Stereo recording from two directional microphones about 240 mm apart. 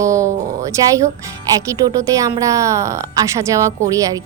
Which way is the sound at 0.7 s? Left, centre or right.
Centre.